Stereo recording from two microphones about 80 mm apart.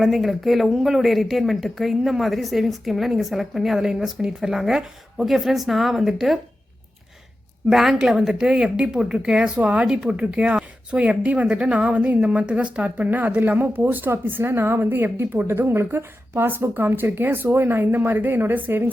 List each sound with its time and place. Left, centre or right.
0.0 s speech: centre
7.7 s a woman's voice: centre; by 18.9 s right